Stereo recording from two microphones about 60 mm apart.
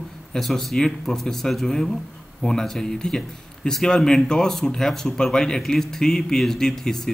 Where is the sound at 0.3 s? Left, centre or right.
Centre.